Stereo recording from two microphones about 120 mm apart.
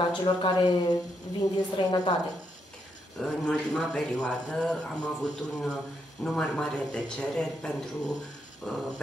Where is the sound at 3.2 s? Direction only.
5° left (ahead or behind).